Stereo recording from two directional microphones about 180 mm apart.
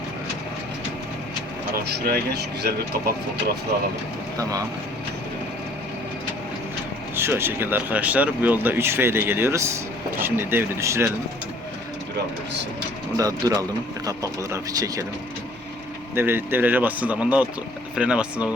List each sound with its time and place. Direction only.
2.0 s speech: 65° right (ahead or behind)
7.2 s speech: 15° right (ahead or behind)
13.1 s speech: 20° right (ahead or behind)
16.1 s speech: 10° right (ahead or behind)